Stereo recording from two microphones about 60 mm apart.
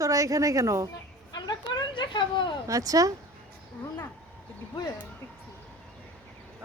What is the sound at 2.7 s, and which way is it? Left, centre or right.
Speech, right.